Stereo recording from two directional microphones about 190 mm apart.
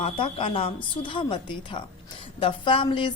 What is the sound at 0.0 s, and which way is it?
A woman's voice, 30° left (ahead or behind).